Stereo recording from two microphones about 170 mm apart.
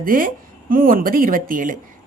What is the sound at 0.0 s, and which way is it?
Speech, 55° right (ahead or behind).